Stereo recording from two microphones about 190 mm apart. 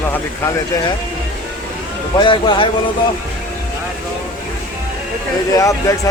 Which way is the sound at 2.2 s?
25° left (ahead or behind).